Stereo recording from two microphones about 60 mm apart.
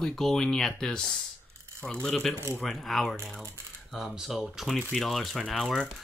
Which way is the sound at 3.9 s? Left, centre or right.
Centre.